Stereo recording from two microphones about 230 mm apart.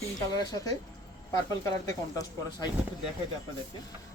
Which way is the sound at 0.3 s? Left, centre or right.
Centre.